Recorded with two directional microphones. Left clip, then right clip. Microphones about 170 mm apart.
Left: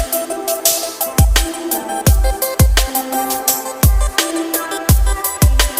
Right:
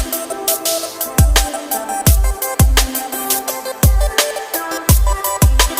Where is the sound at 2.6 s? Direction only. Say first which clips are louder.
Even; centre (ahead or behind).